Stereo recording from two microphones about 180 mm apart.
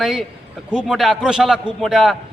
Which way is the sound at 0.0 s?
Centre (ahead or behind).